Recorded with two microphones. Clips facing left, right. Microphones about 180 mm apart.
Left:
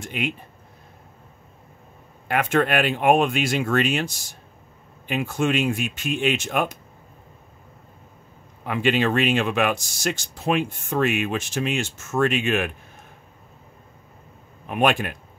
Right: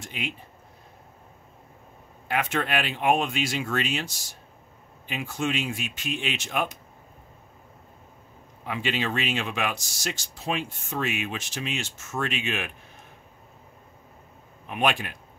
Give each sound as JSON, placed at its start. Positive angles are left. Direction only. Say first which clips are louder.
{"t": 0.0, "sound": "speech", "louder": "left 7 dB", "side_deg": 55}
{"t": 2.2, "sound": "speech", "louder": "left 6 dB", "side_deg": 50}
{"t": 8.6, "sound": "speech", "louder": "left 7 dB", "side_deg": 55}
{"t": 14.7, "sound": "speech", "louder": "left 5 dB", "side_deg": 50}